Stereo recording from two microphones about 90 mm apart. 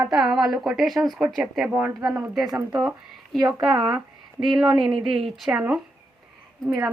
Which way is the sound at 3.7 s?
50° right (ahead or behind).